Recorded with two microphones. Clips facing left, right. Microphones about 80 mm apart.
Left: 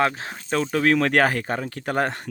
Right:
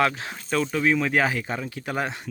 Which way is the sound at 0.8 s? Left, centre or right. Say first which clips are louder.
Left 4 dB; left.